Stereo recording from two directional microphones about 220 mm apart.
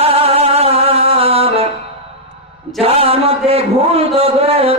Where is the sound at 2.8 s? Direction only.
25° right (ahead or behind).